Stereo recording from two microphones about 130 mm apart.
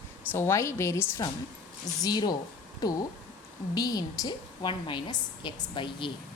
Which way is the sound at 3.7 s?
30° left (ahead or behind).